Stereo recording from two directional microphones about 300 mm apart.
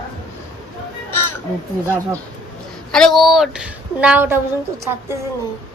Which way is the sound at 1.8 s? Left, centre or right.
Centre.